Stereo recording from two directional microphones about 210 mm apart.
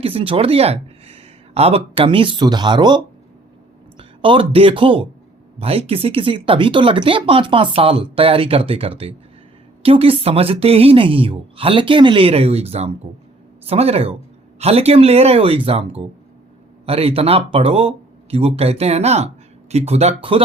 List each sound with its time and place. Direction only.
0.0 s speech: 25° right (ahead or behind)